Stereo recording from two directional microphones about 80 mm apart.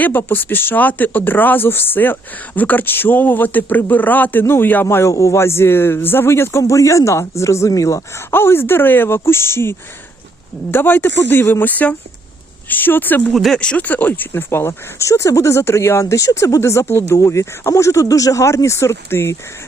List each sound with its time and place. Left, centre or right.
0.0 s speech: left
8.3 s speech: left
13.3 s speech: centre
13.6 s speech: centre; by 19.4 s left